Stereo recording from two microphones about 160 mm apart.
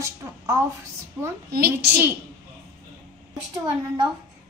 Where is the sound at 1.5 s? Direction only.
75° right (ahead or behind).